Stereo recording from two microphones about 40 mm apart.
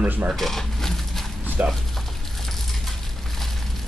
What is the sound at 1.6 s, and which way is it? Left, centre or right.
Speech, right.